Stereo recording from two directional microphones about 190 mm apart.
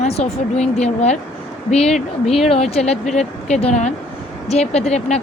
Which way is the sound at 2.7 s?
35° left (ahead or behind).